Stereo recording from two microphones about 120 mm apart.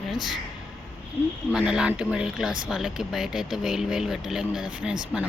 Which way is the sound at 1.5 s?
5° right (ahead or behind).